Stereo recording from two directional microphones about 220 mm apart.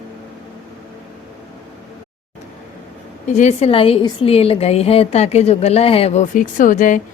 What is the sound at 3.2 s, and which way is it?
A woman's voice, 35° left (ahead or behind).